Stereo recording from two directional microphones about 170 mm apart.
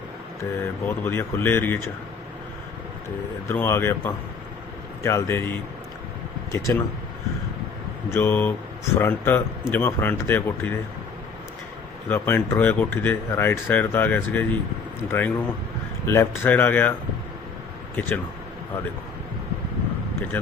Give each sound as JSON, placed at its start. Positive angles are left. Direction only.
{"t": 0.6, "sound": "speech", "side_deg": 10}
{"t": 3.5, "sound": "speech", "side_deg": 15}
{"t": 8.1, "sound": "speech", "side_deg": 10}
{"t": 12.0, "sound": "speech", "side_deg": 15}
{"t": 17.9, "sound": "speech", "side_deg": 10}
{"t": 20.3, "sound": "speech", "side_deg": 10}